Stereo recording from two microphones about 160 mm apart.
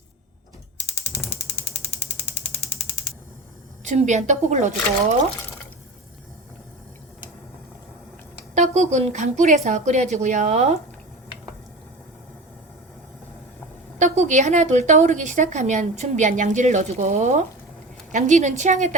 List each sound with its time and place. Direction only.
3.8 s a woman's voice: 50° right (ahead or behind)
8.5 s a woman's voice: 45° right (ahead or behind)
14.0 s a woman's voice: 50° right (ahead or behind)